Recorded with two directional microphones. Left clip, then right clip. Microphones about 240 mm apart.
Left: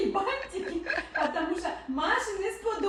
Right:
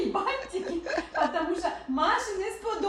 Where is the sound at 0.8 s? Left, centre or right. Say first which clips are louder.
Right 2 dB; centre.